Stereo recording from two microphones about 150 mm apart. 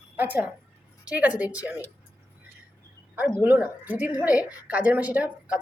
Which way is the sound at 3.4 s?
10° right (ahead or behind).